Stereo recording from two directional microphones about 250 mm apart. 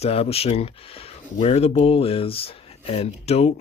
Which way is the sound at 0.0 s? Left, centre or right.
Left.